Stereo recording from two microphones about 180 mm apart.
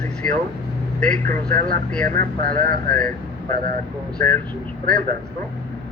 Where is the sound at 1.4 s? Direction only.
50° right (ahead or behind).